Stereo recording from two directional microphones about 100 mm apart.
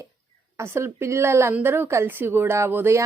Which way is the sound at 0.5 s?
25° right (ahead or behind).